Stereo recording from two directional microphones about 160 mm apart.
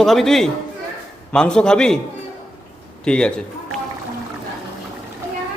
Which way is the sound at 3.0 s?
5° left (ahead or behind).